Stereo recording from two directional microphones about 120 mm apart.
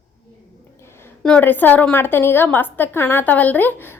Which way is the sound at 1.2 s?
10° left (ahead or behind).